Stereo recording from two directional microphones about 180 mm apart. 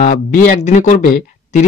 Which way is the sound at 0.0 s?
50° left (ahead or behind).